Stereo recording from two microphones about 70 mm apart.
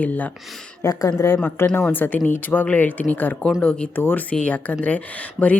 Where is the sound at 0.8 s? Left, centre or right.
Left.